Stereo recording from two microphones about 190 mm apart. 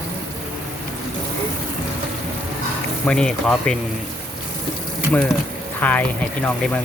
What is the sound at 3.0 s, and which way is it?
Speech, 5° left (ahead or behind).